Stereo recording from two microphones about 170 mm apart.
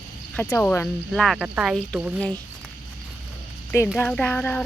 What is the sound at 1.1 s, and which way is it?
Speech, centre (ahead or behind).